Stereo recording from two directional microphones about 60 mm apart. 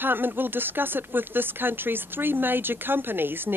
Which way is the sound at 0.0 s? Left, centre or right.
Right.